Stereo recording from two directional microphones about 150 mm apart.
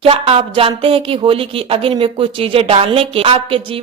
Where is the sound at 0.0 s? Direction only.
40° right (ahead or behind).